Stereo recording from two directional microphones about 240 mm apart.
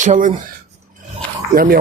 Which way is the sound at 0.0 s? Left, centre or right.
Right.